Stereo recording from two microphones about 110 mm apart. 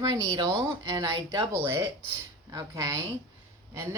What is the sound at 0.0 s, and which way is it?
Speech, 40° right (ahead or behind).